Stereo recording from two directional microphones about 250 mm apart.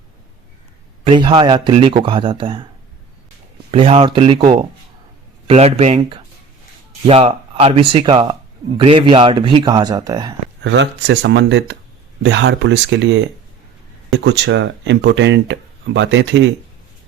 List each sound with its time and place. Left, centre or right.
1.0 s speech: right
3.7 s speech: right
10.6 s speech: right